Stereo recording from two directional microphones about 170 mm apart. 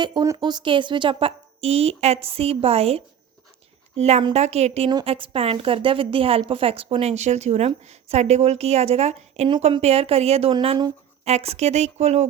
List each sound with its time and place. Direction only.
0.0 s a woman's voice: 25° right (ahead or behind)
4.9 s a woman's voice: 30° right (ahead or behind)